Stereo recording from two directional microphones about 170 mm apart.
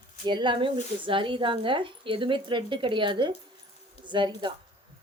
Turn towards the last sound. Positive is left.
turn(degrees=-25)  # may be behind; listen again after turning